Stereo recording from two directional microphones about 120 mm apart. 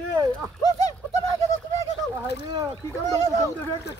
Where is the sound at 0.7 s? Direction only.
30° left (ahead or behind).